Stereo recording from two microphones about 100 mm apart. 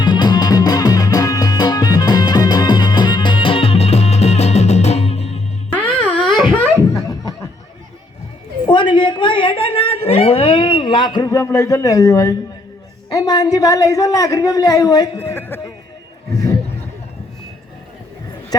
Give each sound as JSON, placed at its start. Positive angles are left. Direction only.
{"t": 0.0, "sound": "music", "side_deg": 45}
{"t": 6.1, "sound": "wail", "side_deg": 0}
{"t": 6.9, "sound": "snicker", "side_deg": 35}
{"t": 8.6, "sound": "a sound", "side_deg": 50}
{"t": 11.3, "sound": "a man's voice", "side_deg": 35}
{"t": 15.2, "sound": "a man's voice", "side_deg": 20}